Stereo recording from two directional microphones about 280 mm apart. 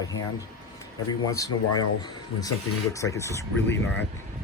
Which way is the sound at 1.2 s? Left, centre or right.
Centre.